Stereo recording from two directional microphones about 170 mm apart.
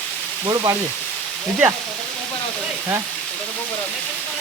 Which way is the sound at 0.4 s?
25° right (ahead or behind).